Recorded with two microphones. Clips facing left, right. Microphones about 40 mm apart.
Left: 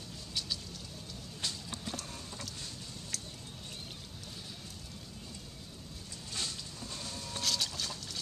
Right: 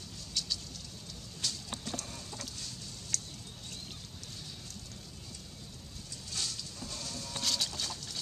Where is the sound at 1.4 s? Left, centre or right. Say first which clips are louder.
Right 1 dB; left.